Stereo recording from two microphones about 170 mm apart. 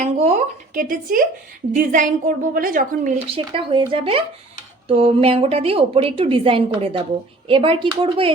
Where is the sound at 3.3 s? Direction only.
30° right (ahead or behind).